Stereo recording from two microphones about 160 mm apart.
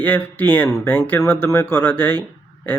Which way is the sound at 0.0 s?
10° left (ahead or behind).